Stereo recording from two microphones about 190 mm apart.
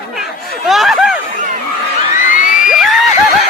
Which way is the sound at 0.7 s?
Centre (ahead or behind).